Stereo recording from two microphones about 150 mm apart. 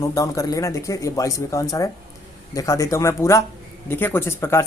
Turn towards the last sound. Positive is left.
turn(degrees=15)  # may be behind; listen again after turning